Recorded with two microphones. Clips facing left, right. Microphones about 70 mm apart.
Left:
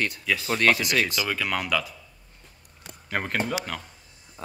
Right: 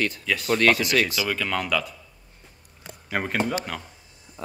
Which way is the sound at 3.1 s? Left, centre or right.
Centre.